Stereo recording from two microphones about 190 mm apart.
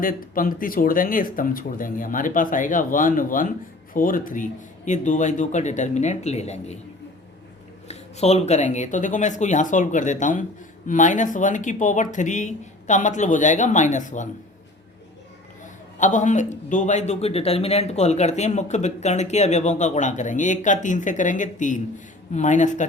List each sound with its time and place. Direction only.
0.0 s a man's voice: 45° left (ahead or behind)
7.9 s a man's voice: 35° left (ahead or behind)
16.0 s a man's voice: 40° left (ahead or behind)